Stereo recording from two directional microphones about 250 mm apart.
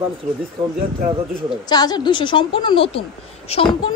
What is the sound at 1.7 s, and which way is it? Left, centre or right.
A woman's voice, centre.